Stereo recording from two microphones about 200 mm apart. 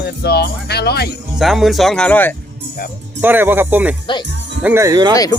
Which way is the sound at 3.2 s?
10° right (ahead or behind).